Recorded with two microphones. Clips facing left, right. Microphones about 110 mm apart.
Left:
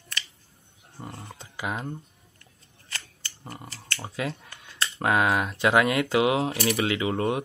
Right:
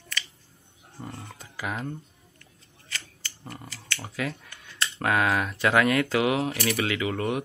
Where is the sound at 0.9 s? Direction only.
25° left (ahead or behind).